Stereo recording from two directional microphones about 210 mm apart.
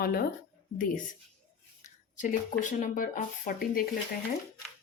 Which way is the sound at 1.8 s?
35° left (ahead or behind).